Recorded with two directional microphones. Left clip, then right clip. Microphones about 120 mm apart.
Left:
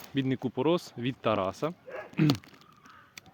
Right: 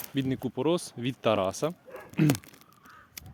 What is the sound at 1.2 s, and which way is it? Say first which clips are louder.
Speech: right 3 dB; 30° right (ahead or behind).